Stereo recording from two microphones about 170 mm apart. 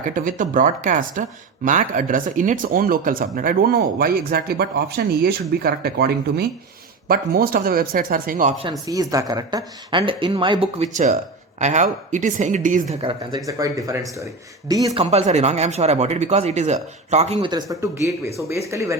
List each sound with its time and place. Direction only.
0.0 s speech: 50° right (ahead or behind)
8.9 s speech: 20° right (ahead or behind); by 12.8 s 50° right (ahead or behind)
13.0 s speech: 30° right (ahead or behind)
13.5 s speech: 20° right (ahead or behind)
14.9 s speech: 40° right (ahead or behind)
17.5 s speech: 20° right (ahead or behind)